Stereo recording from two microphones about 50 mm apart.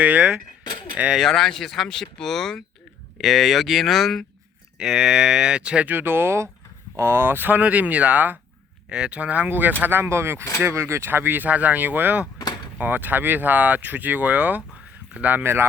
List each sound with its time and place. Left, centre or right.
0.0 s speech: right
1.2 s speech: centre
3.2 s speech: centre
4.8 s speech: centre
5.8 s speech: right
7.6 s speech: right
8.9 s speech: centre
9.5 s speech: right
9.8 s speech: right
11.1 s speech: right
11.4 s speech: right